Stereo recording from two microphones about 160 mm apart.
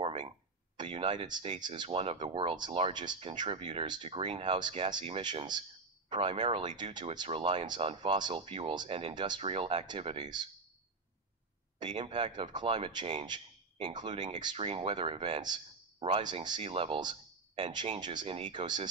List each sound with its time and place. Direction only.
0.0 s a sound: 35° right (ahead or behind)
0.7 s speech: 30° right (ahead or behind)
11.8 s speech: 30° right (ahead or behind)